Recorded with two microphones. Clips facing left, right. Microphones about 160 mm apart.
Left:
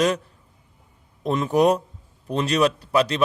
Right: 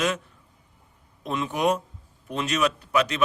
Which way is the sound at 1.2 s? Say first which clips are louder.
Left 6 dB; 40° left (ahead or behind).